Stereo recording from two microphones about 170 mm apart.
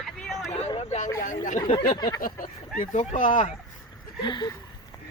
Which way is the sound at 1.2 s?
50° left (ahead or behind).